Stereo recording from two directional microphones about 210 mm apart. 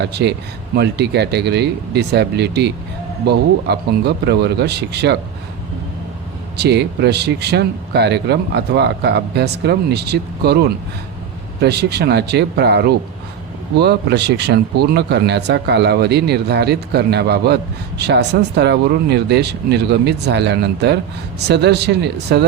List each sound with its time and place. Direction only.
0.0 s speech: 55° right (ahead or behind)
6.6 s speech: 55° right (ahead or behind)